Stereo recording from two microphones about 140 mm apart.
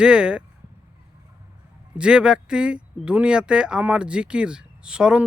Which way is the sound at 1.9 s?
5° right (ahead or behind).